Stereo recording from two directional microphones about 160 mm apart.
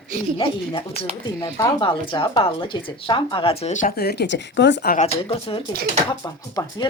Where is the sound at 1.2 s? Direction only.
20° left (ahead or behind); by 5.0 s 80° left.